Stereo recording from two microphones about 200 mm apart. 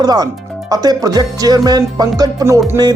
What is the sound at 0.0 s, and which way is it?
Music, 20° right (ahead or behind).